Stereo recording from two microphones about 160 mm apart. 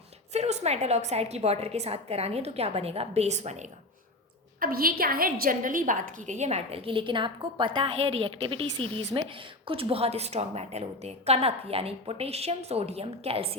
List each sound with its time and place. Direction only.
0.3 s a woman's voice: 45° right (ahead or behind)
4.6 s a woman's voice: 65° right (ahead or behind); by 13.6 s 40° right (ahead or behind)